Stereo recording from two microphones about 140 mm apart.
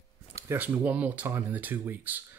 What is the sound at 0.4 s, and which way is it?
Speech, 15° right (ahead or behind).